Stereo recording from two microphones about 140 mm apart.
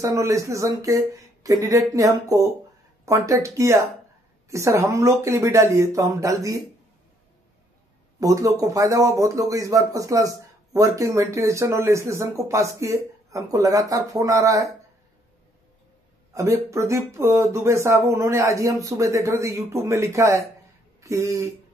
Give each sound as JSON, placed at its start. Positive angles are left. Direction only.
{"t": 0.0, "sound": "speech", "side_deg": -20}
{"t": 8.2, "sound": "speech", "side_deg": -25}
{"t": 16.3, "sound": "speech", "side_deg": -20}